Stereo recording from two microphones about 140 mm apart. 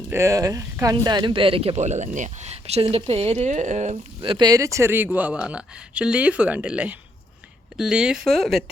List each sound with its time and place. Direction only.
0.1 s speech: 20° right (ahead or behind); by 3.9 s 55° right (ahead or behind)
4.2 s speech: 35° right (ahead or behind); by 8.7 s centre (ahead or behind)